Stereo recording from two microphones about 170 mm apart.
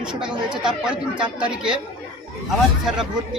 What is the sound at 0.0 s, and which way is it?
Speech, 5° right (ahead or behind).